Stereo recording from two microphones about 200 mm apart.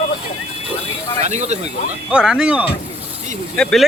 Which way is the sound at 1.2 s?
35° right (ahead or behind).